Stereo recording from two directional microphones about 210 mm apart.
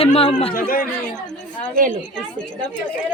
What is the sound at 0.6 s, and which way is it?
Speech, 40° left (ahead or behind).